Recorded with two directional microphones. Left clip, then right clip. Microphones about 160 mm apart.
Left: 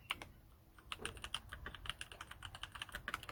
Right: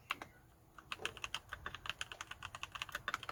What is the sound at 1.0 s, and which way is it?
Typing, 20° right (ahead or behind).